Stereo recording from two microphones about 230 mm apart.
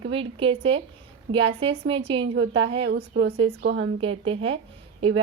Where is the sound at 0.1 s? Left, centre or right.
Right.